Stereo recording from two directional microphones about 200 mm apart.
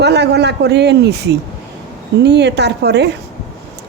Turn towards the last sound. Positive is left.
turn(degrees=-55)  # may be behind; listen again after turning